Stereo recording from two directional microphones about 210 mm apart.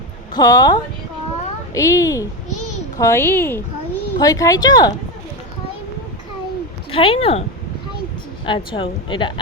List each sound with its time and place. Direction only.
0.3 s a woman's voice: 15° left (ahead or behind)
6.9 s a woman's voice: 25° left (ahead or behind)
8.4 s a woman's voice: 25° left (ahead or behind)